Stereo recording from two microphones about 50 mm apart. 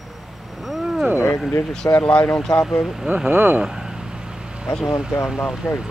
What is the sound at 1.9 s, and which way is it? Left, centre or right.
Speech, left.